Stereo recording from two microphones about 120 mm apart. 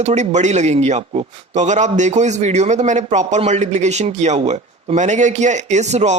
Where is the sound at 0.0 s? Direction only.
70° right (ahead or behind).